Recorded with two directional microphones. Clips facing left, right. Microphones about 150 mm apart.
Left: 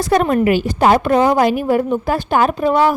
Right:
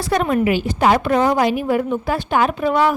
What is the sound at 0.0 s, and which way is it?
A woman's voice, 45° left (ahead or behind).